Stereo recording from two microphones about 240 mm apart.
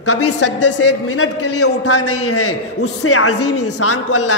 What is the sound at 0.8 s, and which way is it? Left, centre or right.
A man's voice, left.